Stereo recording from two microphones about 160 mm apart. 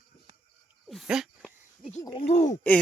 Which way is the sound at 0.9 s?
Centre (ahead or behind).